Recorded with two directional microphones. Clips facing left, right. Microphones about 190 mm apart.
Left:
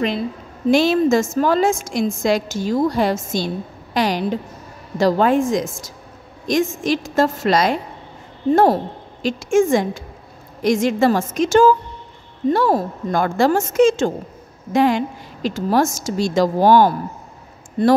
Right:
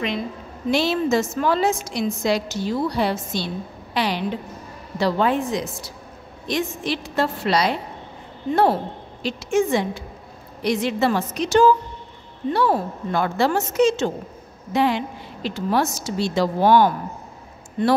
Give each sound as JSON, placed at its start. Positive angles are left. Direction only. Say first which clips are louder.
{"t": 0.7, "sound": "a woman's voice", "louder": "left 6 dB", "side_deg": 45}